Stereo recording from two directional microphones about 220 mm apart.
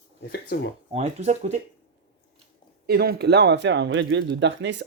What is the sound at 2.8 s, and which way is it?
Speech, 45° right (ahead or behind).